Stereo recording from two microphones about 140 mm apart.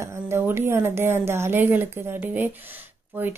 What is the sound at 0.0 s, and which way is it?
A woman's voice, 15° right (ahead or behind).